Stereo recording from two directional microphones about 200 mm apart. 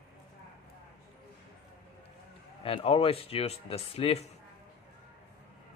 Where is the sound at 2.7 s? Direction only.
30° left (ahead or behind).